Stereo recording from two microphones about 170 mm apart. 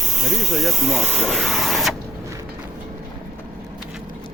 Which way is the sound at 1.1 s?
Centre (ahead or behind).